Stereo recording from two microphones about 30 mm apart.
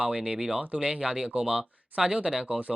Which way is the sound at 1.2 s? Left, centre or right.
Right.